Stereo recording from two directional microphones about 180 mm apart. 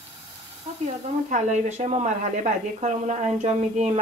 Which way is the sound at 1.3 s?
40° right (ahead or behind).